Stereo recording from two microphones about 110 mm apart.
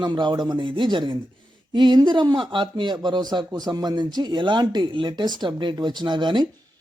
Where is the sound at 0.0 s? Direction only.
45° right (ahead or behind).